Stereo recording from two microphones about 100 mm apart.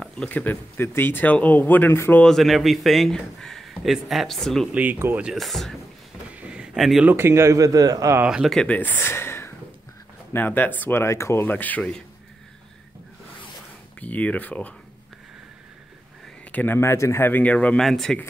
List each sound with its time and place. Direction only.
0.0 s speech: 10° left (ahead or behind)
2.2 s speech: centre (ahead or behind)
4.7 s speech: 20° right (ahead or behind)
5.2 s speech: centre (ahead or behind)
6.3 s a sound: 10° right (ahead or behind)
7.1 s a man's voice: 25° right (ahead or behind)
8.5 s speech: 10° left (ahead or behind)
8.7 s speech: 20° left (ahead or behind)
11.4 s speech: 15° left (ahead or behind)
13.9 s speech: 15° left (ahead or behind)
16.5 s speech: 20° left (ahead or behind)
17.8 s speech: 5° left (ahead or behind)